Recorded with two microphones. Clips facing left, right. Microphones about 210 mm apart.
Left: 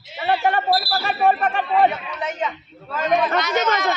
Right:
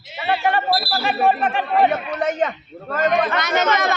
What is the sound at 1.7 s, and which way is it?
A woman's voice, 50° right (ahead or behind).